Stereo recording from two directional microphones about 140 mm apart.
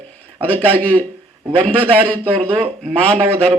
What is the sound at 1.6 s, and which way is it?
Speech, 40° right (ahead or behind).